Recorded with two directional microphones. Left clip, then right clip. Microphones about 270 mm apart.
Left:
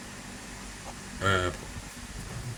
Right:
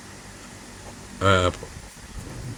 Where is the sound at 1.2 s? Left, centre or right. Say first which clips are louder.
Right 7 dB; centre.